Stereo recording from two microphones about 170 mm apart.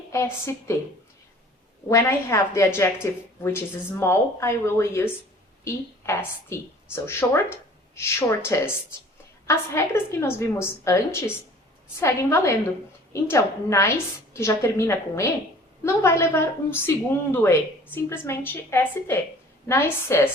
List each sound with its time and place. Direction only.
0.1 s a woman's voice: 15° left (ahead or behind)
1.9 s a woman's voice: 15° left (ahead or behind)